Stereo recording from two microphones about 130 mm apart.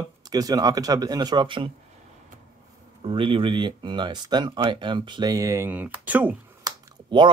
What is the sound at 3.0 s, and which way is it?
Speech, 45° right (ahead or behind).